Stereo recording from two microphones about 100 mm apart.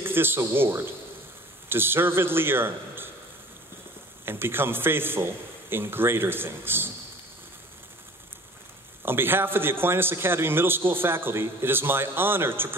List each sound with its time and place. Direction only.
0.0 s a man's voice: 20° right (ahead or behind)
4.3 s a man's voice: 20° right (ahead or behind)
9.0 s a man's voice: 20° right (ahead or behind)